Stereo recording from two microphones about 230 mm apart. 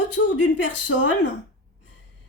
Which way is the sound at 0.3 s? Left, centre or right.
Left.